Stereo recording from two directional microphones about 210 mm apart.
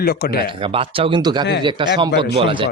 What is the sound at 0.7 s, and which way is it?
Speech, 25° right (ahead or behind).